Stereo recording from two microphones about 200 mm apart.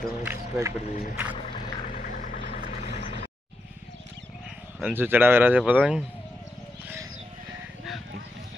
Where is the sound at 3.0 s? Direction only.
30° left (ahead or behind).